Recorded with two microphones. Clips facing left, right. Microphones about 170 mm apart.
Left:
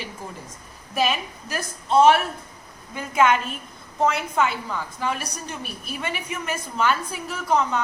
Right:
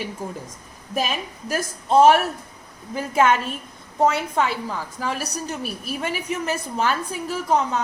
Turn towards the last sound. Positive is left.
turn(degrees=-35)  # may be behind; listen again after turning